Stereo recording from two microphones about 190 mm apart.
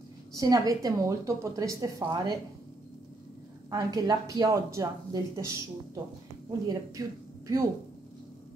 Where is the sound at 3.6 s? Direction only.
20° right (ahead or behind).